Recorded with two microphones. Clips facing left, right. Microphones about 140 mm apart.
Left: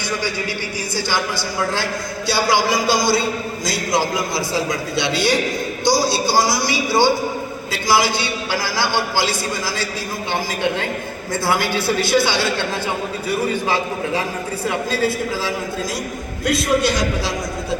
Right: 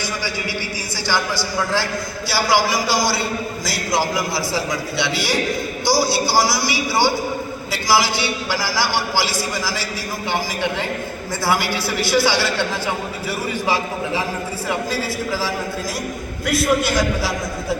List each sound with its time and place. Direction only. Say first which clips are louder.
0.9 s a man's voice: right 1 dB; 20° left (ahead or behind)
11.4 s a man's voice: left 1 dB; 20° left (ahead or behind)
14.8 s a man's voice: left 3 dB; 20° left (ahead or behind)